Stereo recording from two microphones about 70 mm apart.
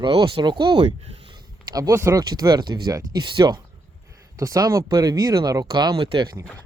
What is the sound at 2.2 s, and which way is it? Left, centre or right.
Speech, right.